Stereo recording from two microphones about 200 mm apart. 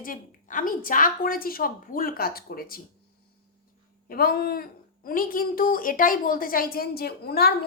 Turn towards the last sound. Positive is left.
turn(degrees=50)  # may be behind; listen again after turning